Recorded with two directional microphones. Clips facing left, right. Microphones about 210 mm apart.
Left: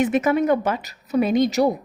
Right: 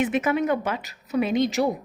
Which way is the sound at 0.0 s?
40° left (ahead or behind).